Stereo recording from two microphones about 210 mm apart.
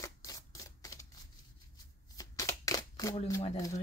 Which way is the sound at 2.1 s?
15° left (ahead or behind).